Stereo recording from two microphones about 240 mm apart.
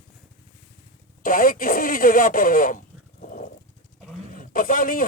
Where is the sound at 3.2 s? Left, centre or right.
Left.